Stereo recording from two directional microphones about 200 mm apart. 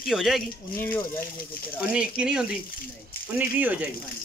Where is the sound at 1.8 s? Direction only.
5° right (ahead or behind).